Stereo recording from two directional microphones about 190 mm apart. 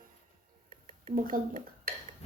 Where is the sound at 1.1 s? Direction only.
45° right (ahead or behind).